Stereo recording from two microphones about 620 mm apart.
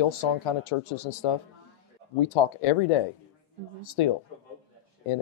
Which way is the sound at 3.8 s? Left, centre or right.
Left.